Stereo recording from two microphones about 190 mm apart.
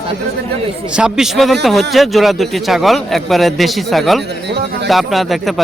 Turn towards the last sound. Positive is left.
turn(degrees=0)  # may be behind; listen again after turning